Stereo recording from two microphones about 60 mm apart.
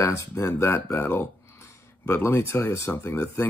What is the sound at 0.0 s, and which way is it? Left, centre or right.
Speech, left.